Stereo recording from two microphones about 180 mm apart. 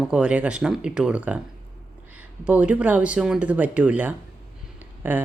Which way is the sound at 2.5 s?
10° right (ahead or behind).